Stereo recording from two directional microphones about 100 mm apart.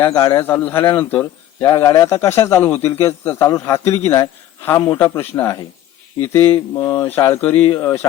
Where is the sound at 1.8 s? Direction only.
35° left (ahead or behind).